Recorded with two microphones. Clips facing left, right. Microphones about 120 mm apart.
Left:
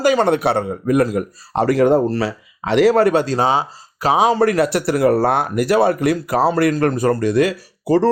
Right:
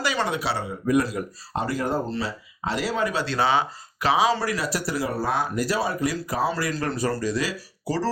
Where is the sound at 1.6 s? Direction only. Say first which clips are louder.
Left 13 dB; 80° left.